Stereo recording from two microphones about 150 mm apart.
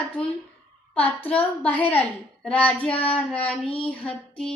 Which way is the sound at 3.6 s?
40° left (ahead or behind).